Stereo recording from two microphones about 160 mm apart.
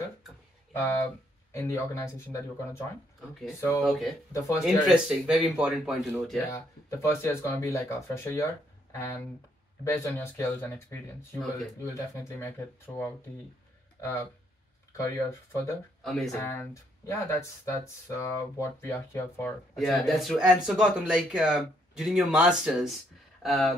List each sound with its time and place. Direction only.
0.7 s speech: 15° left (ahead or behind)
3.2 s speech: centre (ahead or behind)
4.3 s speech: 20° left (ahead or behind)
4.8 s speech: 5° right (ahead or behind)
6.5 s speech: 15° left (ahead or behind)
15.0 s speech: 15° left (ahead or behind)
16.0 s speech: centre (ahead or behind)
17.0 s speech: 15° left (ahead or behind)
19.7 s speech: centre (ahead or behind)